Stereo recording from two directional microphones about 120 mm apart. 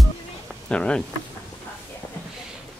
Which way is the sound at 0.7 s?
10° left (ahead or behind).